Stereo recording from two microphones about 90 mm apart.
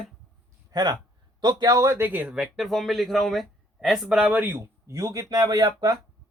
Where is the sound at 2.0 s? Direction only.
20° right (ahead or behind).